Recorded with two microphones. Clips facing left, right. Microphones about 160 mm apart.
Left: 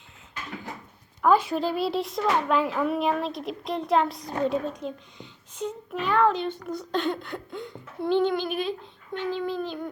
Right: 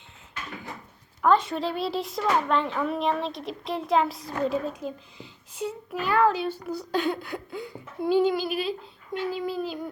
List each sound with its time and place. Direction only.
1.2 s a child's voice: 5° left (ahead or behind)